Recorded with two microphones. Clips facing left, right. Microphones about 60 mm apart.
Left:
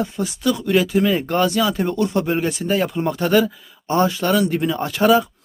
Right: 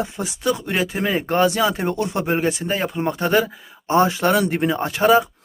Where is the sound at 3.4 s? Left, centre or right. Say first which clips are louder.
Left 3 dB; right.